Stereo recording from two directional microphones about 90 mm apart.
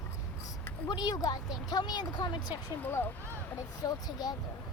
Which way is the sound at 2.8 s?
20° left (ahead or behind).